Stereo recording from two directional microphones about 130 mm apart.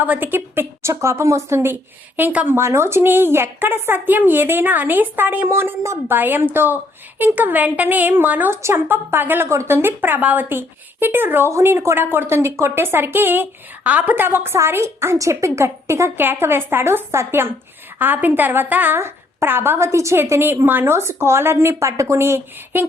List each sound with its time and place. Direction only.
0.0 s a woman's voice: 15° right (ahead or behind)